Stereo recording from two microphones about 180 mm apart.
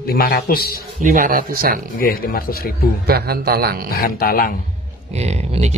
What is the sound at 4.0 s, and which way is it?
Speech, 55° left (ahead or behind).